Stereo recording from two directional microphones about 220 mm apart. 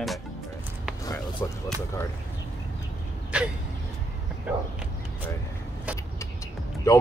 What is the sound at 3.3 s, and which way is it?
Speech, 5° right (ahead or behind).